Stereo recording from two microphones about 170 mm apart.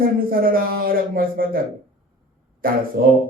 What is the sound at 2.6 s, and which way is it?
Speech, 60° right (ahead or behind).